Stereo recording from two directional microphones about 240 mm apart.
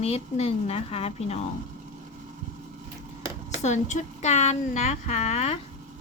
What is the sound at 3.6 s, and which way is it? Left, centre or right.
A woman's voice, left.